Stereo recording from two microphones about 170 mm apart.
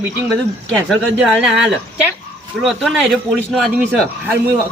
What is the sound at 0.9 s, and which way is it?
A woman's voice, centre (ahead or behind).